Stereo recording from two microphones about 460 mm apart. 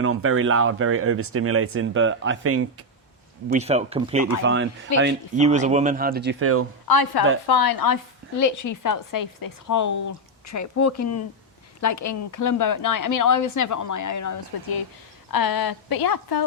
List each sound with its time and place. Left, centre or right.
0.0 s speech: right
3.5 s speech: centre
4.4 s speech: right
6.8 s a woman's voice: left